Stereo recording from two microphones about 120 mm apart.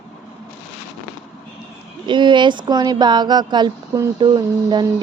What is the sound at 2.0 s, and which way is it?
Speech, 40° right (ahead or behind).